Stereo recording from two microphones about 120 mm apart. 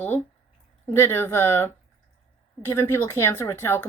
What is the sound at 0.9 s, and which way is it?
A woman's voice, 20° left (ahead or behind).